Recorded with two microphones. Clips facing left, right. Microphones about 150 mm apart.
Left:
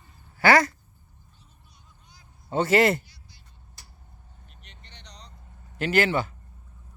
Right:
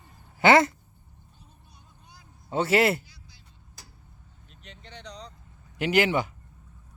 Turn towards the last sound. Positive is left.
turn(degrees=-15)  # may be behind; listen again after turning